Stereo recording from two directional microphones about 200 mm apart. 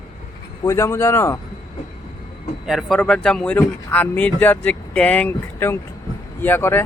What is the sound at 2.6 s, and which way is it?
Speech, centre (ahead or behind).